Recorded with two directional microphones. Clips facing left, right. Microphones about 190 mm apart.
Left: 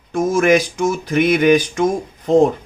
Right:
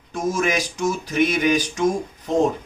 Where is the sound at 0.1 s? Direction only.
60° left (ahead or behind).